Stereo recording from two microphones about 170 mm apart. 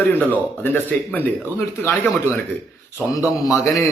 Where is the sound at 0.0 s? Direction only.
10° left (ahead or behind).